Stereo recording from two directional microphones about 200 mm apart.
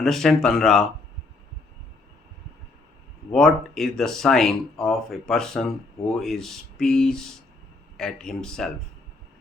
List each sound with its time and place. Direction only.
0.0 s speech: centre (ahead or behind)
3.3 s speech: centre (ahead or behind)